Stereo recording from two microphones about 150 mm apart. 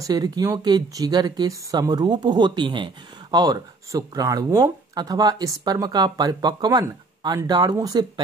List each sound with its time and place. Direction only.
0.0 s speech: 25° right (ahead or behind)